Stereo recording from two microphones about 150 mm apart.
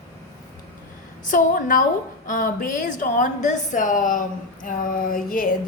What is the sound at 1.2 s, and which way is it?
A woman's voice, 65° left (ahead or behind).